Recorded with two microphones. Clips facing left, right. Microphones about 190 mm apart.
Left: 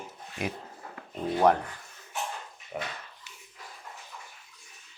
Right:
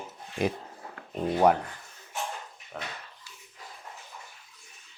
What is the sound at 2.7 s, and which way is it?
Speech, 15° left (ahead or behind).